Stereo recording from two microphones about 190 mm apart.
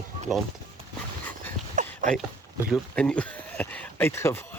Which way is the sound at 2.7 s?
5° left (ahead or behind).